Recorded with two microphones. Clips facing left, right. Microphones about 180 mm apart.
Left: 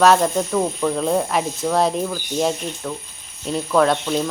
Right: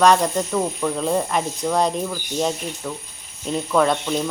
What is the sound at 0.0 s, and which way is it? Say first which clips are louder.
Speech: left 1 dB; centre (ahead or behind).